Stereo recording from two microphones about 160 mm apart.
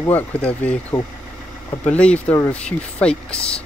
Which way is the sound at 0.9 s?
25° left (ahead or behind).